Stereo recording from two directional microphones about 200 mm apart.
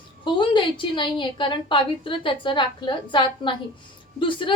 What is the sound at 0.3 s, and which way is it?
A woman's voice, 25° left (ahead or behind).